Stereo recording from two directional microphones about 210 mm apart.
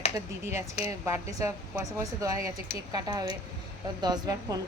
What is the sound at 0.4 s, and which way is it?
A woman's voice, 15° right (ahead or behind).